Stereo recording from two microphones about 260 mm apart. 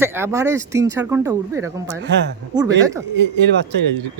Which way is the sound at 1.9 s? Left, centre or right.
Right.